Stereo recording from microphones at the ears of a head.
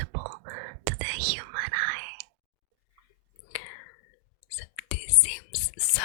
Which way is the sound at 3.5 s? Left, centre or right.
Left.